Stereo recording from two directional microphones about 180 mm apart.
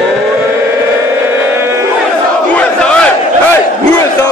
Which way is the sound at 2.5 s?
5° left (ahead or behind).